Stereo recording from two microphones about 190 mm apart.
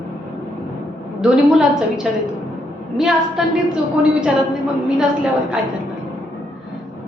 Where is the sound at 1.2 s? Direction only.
5° right (ahead or behind).